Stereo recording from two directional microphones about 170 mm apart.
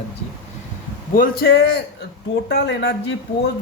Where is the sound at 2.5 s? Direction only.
90° left.